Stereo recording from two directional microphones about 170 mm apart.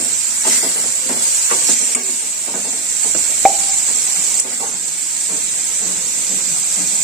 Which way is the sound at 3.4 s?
Centre (ahead or behind).